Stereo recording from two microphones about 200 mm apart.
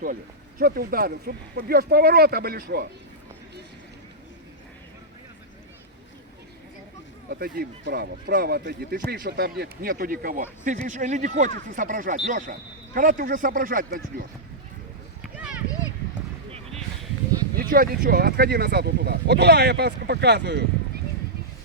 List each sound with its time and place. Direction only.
0.6 s speech: 50° right (ahead or behind)
7.3 s speech: 50° right (ahead or behind)
15.2 s a sound: 5° right (ahead or behind)
17.5 s speech: 50° right (ahead or behind)